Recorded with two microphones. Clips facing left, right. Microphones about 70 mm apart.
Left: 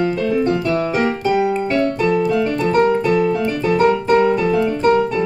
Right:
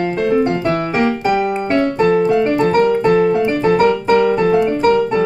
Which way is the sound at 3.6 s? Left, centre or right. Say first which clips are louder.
Even; right.